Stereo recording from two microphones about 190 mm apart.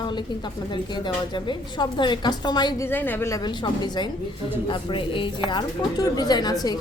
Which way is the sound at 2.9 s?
10° left (ahead or behind).